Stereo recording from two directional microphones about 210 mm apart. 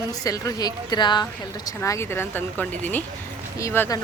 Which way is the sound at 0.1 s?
15° left (ahead or behind).